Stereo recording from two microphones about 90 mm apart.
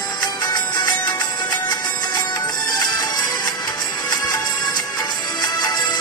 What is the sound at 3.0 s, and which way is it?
Music, 50° left (ahead or behind).